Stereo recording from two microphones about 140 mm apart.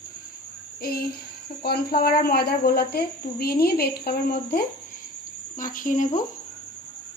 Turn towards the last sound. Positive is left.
turn(degrees=70)  # may be behind; listen again after turning